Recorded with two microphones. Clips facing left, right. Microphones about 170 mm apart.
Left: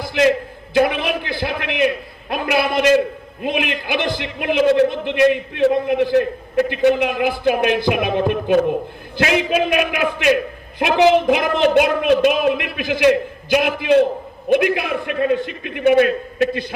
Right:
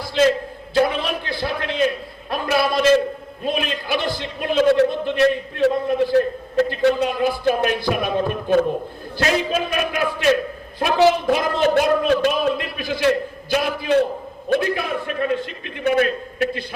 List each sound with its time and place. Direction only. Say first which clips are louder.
0.1 s a sound: left 1 dB; 15° left (ahead or behind)
10.8 s a man's voice: left 3 dB; 20° left (ahead or behind)
15.0 s a man's voice: left 4 dB; 15° left (ahead or behind)